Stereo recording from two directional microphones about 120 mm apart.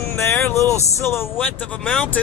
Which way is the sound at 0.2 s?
20° left (ahead or behind).